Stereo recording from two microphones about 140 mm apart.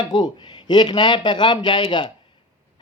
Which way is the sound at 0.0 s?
30° left (ahead or behind).